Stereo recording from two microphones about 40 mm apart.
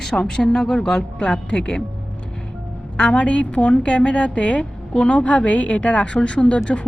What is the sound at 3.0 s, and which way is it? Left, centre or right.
A woman's voice, left.